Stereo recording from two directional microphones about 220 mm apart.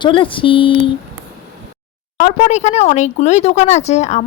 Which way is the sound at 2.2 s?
35° left (ahead or behind).